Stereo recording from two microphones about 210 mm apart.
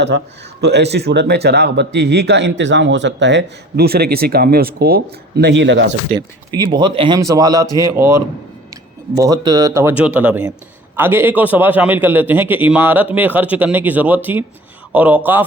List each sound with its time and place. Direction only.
0.6 s speech: 55° right (ahead or behind)
6.1 s a man's voice: 20° right (ahead or behind)